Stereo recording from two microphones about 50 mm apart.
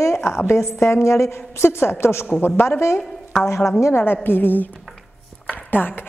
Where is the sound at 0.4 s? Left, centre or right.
Left.